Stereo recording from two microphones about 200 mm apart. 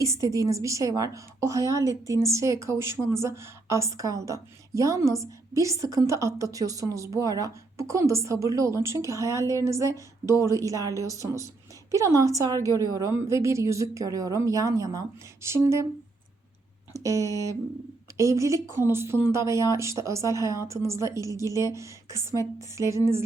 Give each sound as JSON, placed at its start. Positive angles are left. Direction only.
{"t": 0.0, "sound": "a woman's voice", "side_deg": -15}
{"t": 16.9, "sound": "a woman's voice", "side_deg": -15}